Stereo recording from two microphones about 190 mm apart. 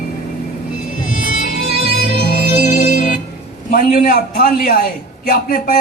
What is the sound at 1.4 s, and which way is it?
Music, 45° left (ahead or behind).